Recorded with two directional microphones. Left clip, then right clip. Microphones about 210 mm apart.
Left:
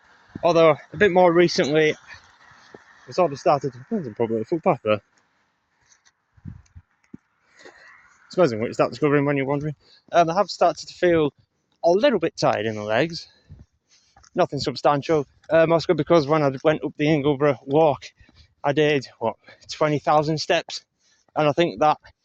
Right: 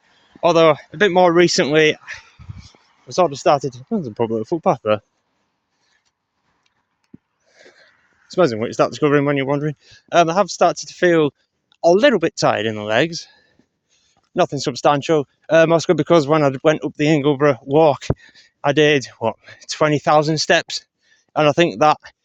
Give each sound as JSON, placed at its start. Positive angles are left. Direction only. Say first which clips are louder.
{"t": 0.4, "sound": "speech", "louder": "right 3 dB", "side_deg": -35}
{"t": 0.8, "sound": "speech", "louder": "right 3 dB", "side_deg": -20}
{"t": 2.3, "sound": "a sound", "louder": "even", "side_deg": 5}
{"t": 3.1, "sound": "speech", "louder": "right 4 dB", "side_deg": -40}
{"t": 4.3, "sound": "speech", "louder": "right 3 dB", "side_deg": -25}
{"t": 8.3, "sound": "speech", "louder": "right 3 dB", "side_deg": -25}